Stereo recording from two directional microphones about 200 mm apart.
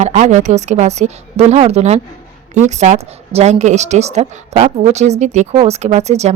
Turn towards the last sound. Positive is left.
turn(degrees=-35)  # may be behind; listen again after turning